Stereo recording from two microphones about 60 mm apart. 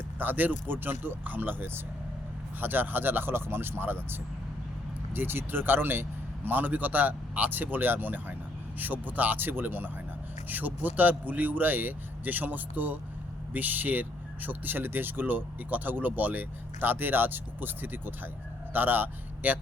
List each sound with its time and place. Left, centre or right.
0.2 s speech: right